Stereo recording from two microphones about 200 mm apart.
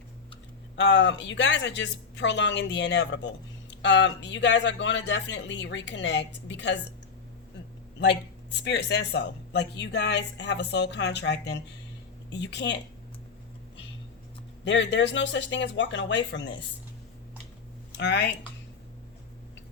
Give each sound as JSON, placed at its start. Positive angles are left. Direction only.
{"t": 0.8, "sound": "a woman's voice", "side_deg": 65}
{"t": 7.9, "sound": "a woman's voice", "side_deg": 60}
{"t": 14.6, "sound": "a woman's voice", "side_deg": 65}
{"t": 17.9, "sound": "speech", "side_deg": 60}